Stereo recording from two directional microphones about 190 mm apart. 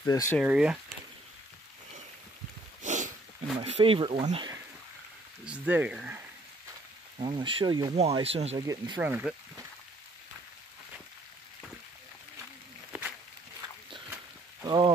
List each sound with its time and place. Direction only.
0.0 s speech: 15° left (ahead or behind)
0.4 s speech: 5° right (ahead or behind)
2.8 s a sound: 40° right (ahead or behind)
3.5 s speech: 30° right (ahead or behind)
5.4 s speech: 5° right (ahead or behind)
7.2 s speech: 25° right (ahead or behind)
7.9 s speech: 35° right (ahead or behind)
8.6 s speech: 20° right (ahead or behind)
9.0 s speech: 10° right (ahead or behind)
14.6 s rain on surface: 20° right (ahead or behind)